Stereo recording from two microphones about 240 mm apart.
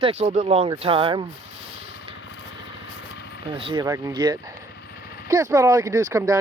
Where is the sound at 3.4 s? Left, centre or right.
Right.